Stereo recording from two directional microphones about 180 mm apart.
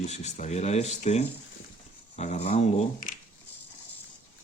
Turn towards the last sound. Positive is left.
turn(degrees=35)  # may be behind; listen again after turning